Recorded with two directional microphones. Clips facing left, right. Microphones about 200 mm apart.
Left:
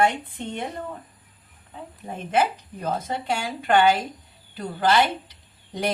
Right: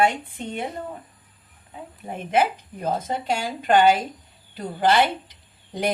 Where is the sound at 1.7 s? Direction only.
15° right (ahead or behind).